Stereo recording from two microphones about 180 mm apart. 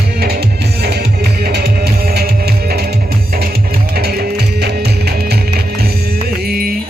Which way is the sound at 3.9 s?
60° right (ahead or behind).